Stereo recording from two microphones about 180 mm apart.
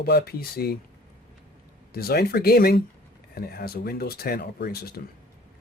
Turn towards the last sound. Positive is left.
turn(degrees=60)  # may be behind; listen again after turning